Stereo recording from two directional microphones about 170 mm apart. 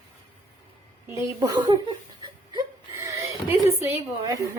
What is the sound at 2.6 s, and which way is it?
Whimper, 20° right (ahead or behind).